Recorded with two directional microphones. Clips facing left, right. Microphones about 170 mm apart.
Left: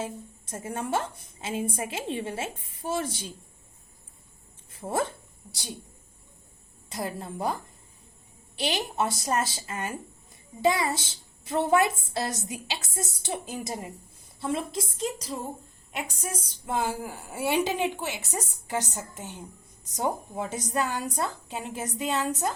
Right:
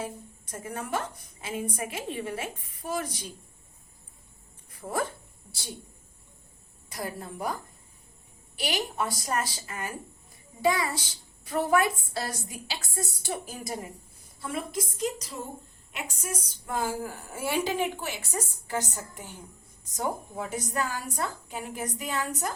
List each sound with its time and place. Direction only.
0.0 s a child's voice: 25° left (ahead or behind)
4.8 s a child's voice: 25° left (ahead or behind)
6.9 s a child's voice: 20° left (ahead or behind)
8.5 s a child's voice: 20° left (ahead or behind)
16.6 s a child's voice: 20° left (ahead or behind)